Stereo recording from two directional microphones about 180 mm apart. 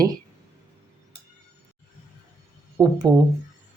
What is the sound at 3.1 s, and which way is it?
Speech, 20° right (ahead or behind).